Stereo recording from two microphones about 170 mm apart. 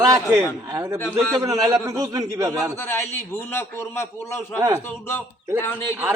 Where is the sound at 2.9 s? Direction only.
15° left (ahead or behind).